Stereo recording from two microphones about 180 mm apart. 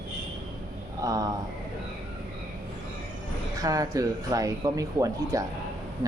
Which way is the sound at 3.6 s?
20° right (ahead or behind).